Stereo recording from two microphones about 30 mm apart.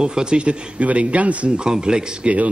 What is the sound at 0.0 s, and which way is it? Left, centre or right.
Speech, right.